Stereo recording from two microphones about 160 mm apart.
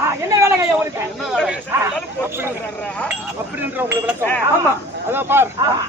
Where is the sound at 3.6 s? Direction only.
10° right (ahead or behind).